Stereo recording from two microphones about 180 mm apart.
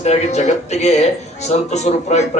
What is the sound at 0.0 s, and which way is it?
Speech, 35° left (ahead or behind).